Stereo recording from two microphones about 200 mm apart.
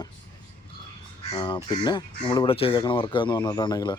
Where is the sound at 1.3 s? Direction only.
20° left (ahead or behind).